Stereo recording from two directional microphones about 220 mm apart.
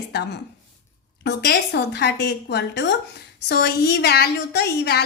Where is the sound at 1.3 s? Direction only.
50° left (ahead or behind).